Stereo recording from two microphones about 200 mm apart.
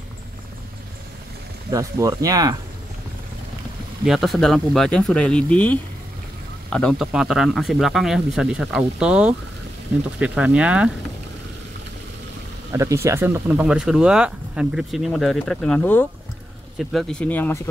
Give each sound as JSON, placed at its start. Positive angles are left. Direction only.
{"t": 1.7, "sound": "speech", "side_deg": -15}
{"t": 4.0, "sound": "speech", "side_deg": 0}
{"t": 12.7, "sound": "speech", "side_deg": -15}